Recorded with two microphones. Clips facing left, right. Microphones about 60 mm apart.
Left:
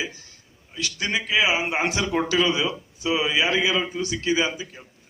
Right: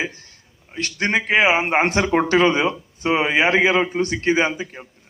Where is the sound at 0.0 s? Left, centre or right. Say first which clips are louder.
Right 4 dB; right.